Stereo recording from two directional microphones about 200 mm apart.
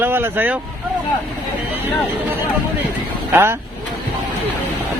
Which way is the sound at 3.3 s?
10° right (ahead or behind).